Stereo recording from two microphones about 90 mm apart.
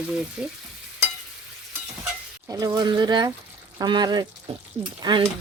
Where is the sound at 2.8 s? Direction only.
55° right (ahead or behind).